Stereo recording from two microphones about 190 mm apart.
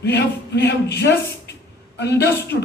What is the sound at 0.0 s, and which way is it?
A woman's voice, 60° left (ahead or behind).